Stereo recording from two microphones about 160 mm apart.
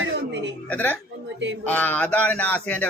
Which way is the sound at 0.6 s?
10° left (ahead or behind).